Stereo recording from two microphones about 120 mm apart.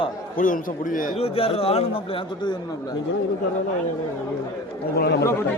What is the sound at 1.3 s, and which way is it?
Speech, 55° left (ahead or behind).